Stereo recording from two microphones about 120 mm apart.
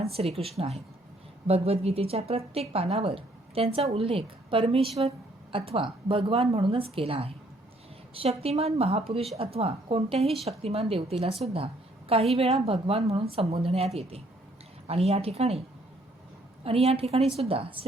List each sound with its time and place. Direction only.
0.0 s a woman's voice: 55° right (ahead or behind)
16.6 s a woman's voice: 55° right (ahead or behind)